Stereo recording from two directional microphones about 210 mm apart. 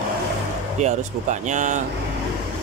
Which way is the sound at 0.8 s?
35° right (ahead or behind).